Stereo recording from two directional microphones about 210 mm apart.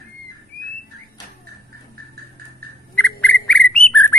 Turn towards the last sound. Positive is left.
turn(degrees=5)  # may be behind; listen again after turning